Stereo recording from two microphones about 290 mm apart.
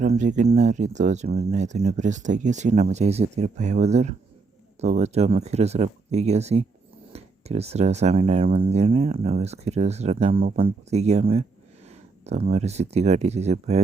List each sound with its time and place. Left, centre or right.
0.0 s speech: right